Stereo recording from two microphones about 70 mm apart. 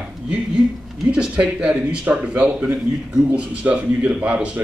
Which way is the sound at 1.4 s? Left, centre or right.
Centre.